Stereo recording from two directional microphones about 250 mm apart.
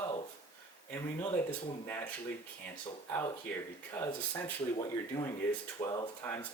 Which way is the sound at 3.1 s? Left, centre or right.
Centre.